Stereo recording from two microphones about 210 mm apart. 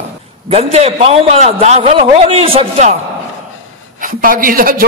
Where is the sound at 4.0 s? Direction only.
40° right (ahead or behind).